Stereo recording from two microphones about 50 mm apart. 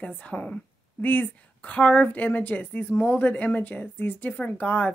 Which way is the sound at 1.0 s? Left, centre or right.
Left.